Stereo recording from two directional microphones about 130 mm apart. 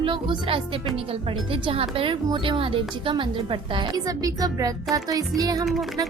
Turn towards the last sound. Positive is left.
turn(degrees=0)  # may be behind; listen again after turning